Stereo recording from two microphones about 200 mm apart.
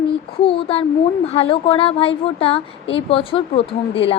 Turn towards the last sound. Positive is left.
turn(degrees=30)  # may be behind; listen again after turning